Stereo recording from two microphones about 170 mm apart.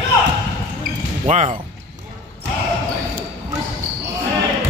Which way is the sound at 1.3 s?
45° right (ahead or behind).